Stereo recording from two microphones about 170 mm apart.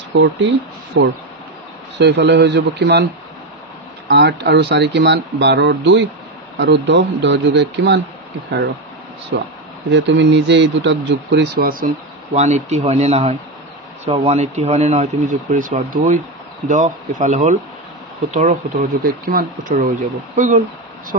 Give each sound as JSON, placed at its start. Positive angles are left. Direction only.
{"t": 0.1, "sound": "speech", "side_deg": -90}
{"t": 4.1, "sound": "speech", "side_deg": -80}
{"t": 9.3, "sound": "speech", "side_deg": -90}
{"t": 12.4, "sound": "speech", "side_deg": -45}